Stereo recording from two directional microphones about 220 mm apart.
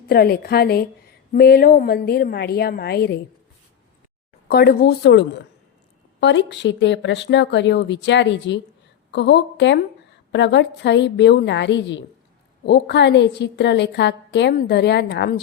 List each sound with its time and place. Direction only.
0.1 s a woman's voice: 45° left (ahead or behind)
4.4 s a woman's voice: 45° left (ahead or behind)